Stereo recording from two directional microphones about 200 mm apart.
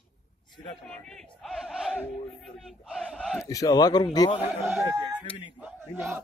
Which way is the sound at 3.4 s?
15° left (ahead or behind).